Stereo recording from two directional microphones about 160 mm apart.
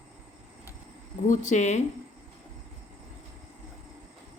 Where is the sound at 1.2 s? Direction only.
50° left (ahead or behind).